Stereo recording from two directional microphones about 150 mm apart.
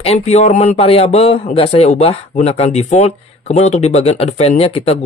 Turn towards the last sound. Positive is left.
turn(degrees=40)  # may be behind; listen again after turning